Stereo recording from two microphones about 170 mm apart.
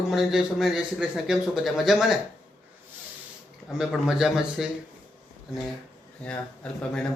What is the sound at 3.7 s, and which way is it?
A man's voice, centre (ahead or behind).